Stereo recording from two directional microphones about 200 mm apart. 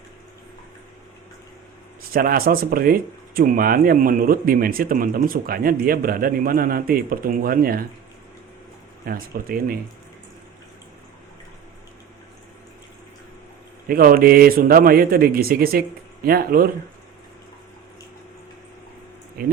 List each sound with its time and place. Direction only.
2.0 s speech: 45° right (ahead or behind)
9.0 s speech: 45° right (ahead or behind)
13.8 s speech: 45° right (ahead or behind)
19.4 s speech: 50° right (ahead or behind)